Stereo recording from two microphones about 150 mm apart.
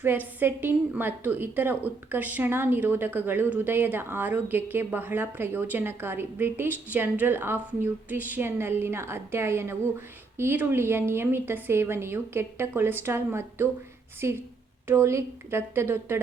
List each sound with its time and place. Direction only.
0.0 s a woman's voice: 10° right (ahead or behind)